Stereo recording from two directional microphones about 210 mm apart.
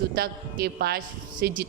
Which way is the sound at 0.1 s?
45° right (ahead or behind).